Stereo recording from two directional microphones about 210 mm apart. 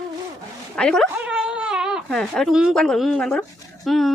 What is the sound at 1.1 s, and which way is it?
Speech, 5° right (ahead or behind).